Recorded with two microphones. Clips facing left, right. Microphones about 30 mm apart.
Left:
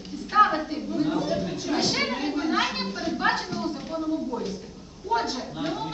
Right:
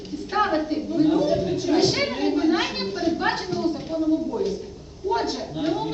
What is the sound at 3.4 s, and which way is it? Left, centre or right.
Speech, right.